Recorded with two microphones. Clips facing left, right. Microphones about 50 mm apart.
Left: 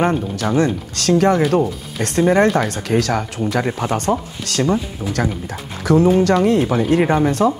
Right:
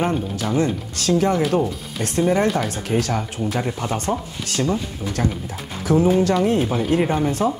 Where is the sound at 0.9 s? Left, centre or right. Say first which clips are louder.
Left 4 dB; left.